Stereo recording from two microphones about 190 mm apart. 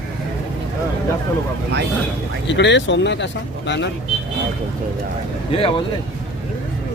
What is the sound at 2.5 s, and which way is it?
Speech, 70° left (ahead or behind).